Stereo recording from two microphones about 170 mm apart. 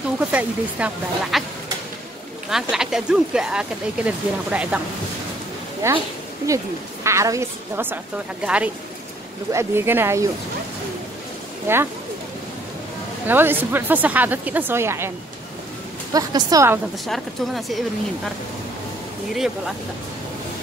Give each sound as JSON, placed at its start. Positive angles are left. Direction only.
{"t": 0.3, "sound": "a woman's voice", "side_deg": -10}
{"t": 2.7, "sound": "a woman's voice", "side_deg": -5}
{"t": 11.6, "sound": "speech", "side_deg": -15}
{"t": 13.3, "sound": "a woman's voice", "side_deg": -10}
{"t": 17.0, "sound": "speech", "side_deg": 0}
{"t": 19.3, "sound": "speech", "side_deg": 0}